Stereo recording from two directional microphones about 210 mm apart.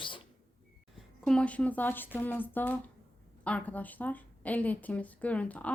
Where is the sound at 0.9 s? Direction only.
Centre (ahead or behind).